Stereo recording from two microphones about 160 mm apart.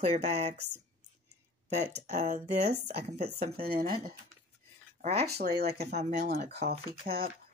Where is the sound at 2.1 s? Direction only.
45° right (ahead or behind).